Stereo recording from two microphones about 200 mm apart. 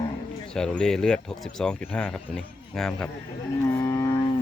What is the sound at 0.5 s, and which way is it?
Speech, 5° left (ahead or behind).